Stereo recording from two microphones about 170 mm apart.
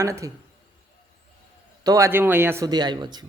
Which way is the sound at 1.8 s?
20° right (ahead or behind).